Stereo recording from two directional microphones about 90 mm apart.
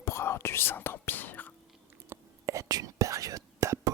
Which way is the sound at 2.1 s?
35° right (ahead or behind).